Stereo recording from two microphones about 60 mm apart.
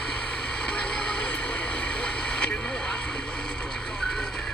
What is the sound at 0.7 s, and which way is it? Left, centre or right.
Vehicle, centre.